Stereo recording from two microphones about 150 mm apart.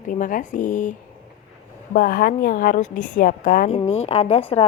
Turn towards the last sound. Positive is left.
turn(degrees=40)  # may be behind; listen again after turning